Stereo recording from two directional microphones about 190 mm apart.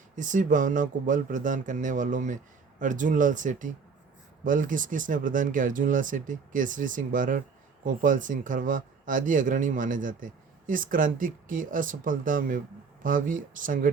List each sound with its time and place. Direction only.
0.2 s speech: 40° right (ahead or behind)